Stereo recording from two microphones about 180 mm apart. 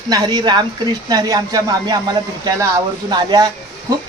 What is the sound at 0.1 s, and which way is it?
Speech, 20° right (ahead or behind).